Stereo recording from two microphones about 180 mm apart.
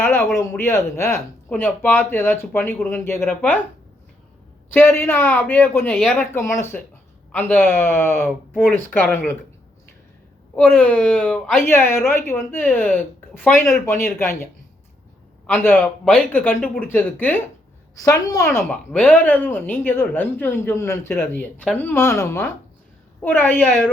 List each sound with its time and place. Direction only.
0.0 s a sound: 10° left (ahead or behind)
0.5 s speech: 15° left (ahead or behind)
4.7 s speech: 15° left (ahead or behind)
6.1 s speech: 15° left (ahead or behind)
10.5 s speech: 5° left (ahead or behind)
15.4 s a woman's voice: 10° left (ahead or behind)
18.7 s speech: 5° left (ahead or behind)